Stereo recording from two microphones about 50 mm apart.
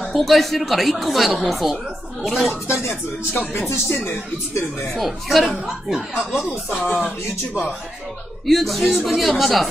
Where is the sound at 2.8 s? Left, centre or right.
Left.